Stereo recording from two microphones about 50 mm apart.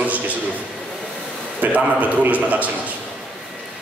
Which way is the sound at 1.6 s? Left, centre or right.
Right.